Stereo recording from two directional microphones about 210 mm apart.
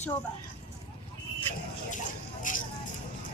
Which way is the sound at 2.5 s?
40° left (ahead or behind).